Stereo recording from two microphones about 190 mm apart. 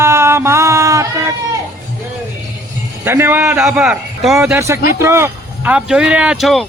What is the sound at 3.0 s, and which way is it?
A man's voice, 15° right (ahead or behind).